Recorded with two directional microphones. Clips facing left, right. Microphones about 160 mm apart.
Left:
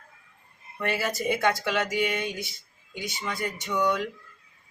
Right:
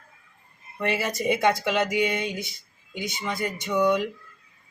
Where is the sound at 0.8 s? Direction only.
20° right (ahead or behind).